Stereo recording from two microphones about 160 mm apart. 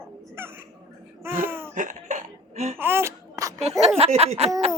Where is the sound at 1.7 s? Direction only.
55° right (ahead or behind).